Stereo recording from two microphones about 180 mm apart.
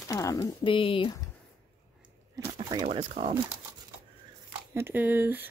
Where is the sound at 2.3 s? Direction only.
20° right (ahead or behind).